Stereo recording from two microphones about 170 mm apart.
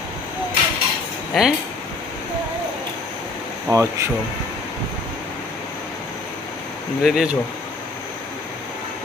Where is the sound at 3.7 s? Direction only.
20° right (ahead or behind).